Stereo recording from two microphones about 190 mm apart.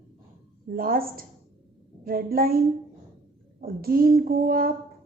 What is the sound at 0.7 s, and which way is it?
A woman's voice, 50° right (ahead or behind).